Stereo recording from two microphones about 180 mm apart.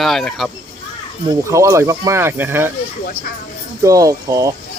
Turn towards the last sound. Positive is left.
turn(degrees=-20)  # may be behind; listen again after turning